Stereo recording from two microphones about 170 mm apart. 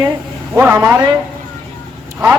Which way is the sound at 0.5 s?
15° right (ahead or behind).